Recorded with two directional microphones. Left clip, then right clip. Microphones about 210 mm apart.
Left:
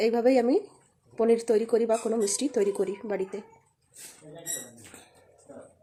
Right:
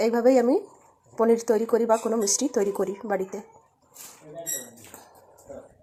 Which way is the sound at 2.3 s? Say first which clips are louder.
Right 4 dB; 35° right (ahead or behind).